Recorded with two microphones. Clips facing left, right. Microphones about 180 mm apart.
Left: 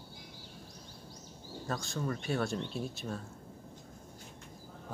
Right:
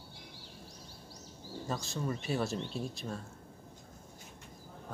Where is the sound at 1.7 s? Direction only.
Centre (ahead or behind).